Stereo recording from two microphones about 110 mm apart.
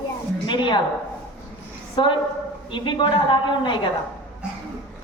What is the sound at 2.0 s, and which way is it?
A woman's voice, 50° left (ahead or behind).